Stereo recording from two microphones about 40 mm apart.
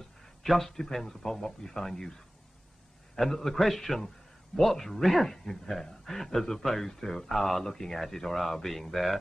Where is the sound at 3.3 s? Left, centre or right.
Centre.